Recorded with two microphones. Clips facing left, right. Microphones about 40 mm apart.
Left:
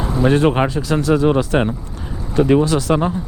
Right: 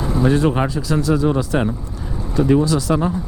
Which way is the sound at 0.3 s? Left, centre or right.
Left.